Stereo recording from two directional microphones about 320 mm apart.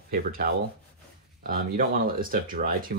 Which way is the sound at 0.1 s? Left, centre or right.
Right.